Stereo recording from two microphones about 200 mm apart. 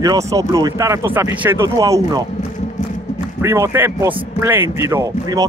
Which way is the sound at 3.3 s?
15° right (ahead or behind).